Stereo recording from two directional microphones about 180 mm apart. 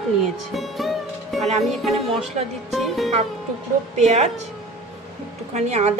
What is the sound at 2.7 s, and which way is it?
Music, centre (ahead or behind).